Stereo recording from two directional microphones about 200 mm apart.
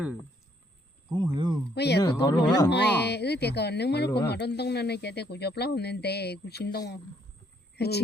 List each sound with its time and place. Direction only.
1.1 s speech: 20° right (ahead or behind)
1.7 s speech: 55° left (ahead or behind)